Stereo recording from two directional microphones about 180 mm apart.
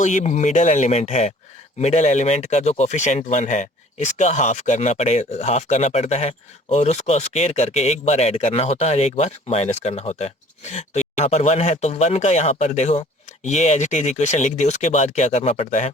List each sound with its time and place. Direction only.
0.0 s speech: 45° left (ahead or behind)